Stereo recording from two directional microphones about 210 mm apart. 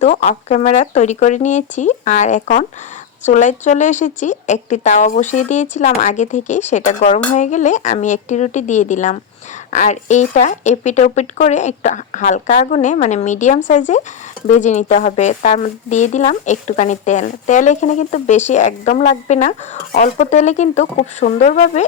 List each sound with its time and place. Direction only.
0.0 s speech: 35° left (ahead or behind)